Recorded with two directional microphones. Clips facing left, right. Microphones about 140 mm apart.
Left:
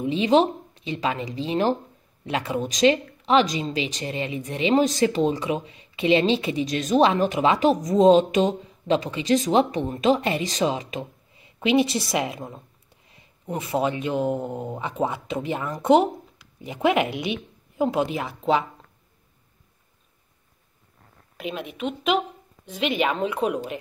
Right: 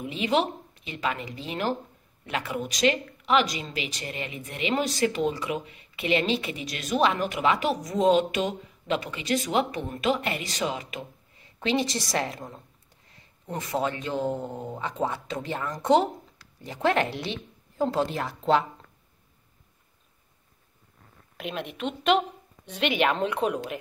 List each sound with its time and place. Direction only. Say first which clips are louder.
0.0 s speech: left 6 dB; 25° left (ahead or behind)
13.7 s speech: left 4 dB; 15° left (ahead or behind)
16.5 s speech: left 3 dB; 10° left (ahead or behind)
21.4 s speech: left 2 dB; centre (ahead or behind)